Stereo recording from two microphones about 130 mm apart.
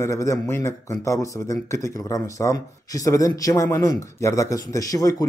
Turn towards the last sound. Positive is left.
turn(degrees=25)  # may be behind; listen again after turning